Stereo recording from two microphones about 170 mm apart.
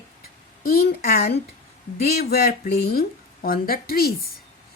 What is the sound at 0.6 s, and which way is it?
Speech, 60° left (ahead or behind).